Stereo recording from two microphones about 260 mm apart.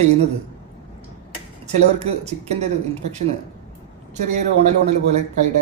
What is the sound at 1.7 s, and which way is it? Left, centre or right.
Speech, right.